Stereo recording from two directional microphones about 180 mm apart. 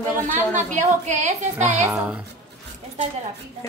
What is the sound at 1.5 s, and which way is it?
Speech, 10° right (ahead or behind).